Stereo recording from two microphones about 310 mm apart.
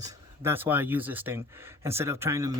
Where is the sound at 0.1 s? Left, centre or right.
Centre.